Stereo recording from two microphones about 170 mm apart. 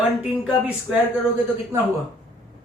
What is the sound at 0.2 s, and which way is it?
Speech, 5° right (ahead or behind).